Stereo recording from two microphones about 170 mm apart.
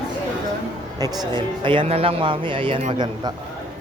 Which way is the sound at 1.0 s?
25° right (ahead or behind).